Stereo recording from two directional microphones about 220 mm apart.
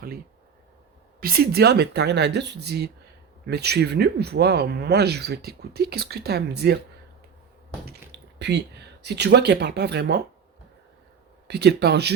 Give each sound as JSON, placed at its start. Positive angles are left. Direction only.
{"t": 1.2, "sound": "speech", "side_deg": -45}
{"t": 8.4, "sound": "speech", "side_deg": -50}
{"t": 11.4, "sound": "speech", "side_deg": -50}